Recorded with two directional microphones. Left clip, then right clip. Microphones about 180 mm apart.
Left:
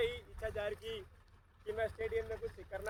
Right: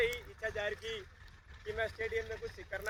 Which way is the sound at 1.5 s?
50° left (ahead or behind).